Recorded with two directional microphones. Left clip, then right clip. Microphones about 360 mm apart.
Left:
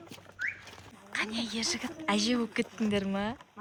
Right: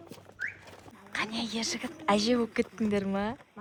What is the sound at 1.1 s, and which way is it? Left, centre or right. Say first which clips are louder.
Speech: even; centre.